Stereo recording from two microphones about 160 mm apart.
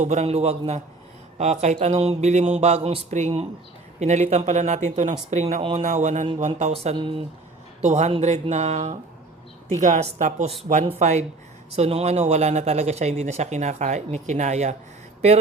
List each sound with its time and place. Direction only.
0.0 s a man's voice: 45° right (ahead or behind)
6.9 s a man's voice: 35° right (ahead or behind)
7.8 s speech: 45° right (ahead or behind)